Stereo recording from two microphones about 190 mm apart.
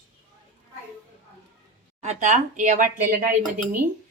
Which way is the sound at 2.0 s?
35° right (ahead or behind).